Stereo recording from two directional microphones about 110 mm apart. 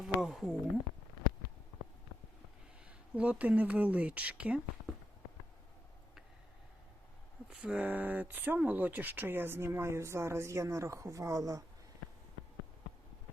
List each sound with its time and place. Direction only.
0.0 s a sound: 5° right (ahead or behind)
3.2 s speech: 15° right (ahead or behind)
7.5 s speech: 10° right (ahead or behind); by 11.6 s 30° right (ahead or behind)